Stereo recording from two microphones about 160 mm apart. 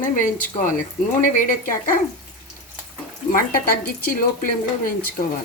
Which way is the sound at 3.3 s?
65° left (ahead or behind).